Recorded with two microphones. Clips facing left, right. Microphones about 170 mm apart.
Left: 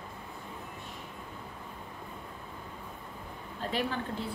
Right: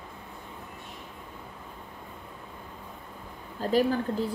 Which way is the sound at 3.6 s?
40° right (ahead or behind).